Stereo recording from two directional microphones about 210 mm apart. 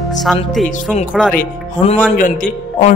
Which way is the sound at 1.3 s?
40° left (ahead or behind).